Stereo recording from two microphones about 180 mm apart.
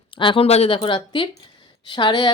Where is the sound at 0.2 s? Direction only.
30° left (ahead or behind).